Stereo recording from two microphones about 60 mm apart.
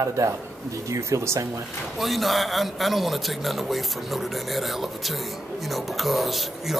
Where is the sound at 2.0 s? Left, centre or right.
Centre.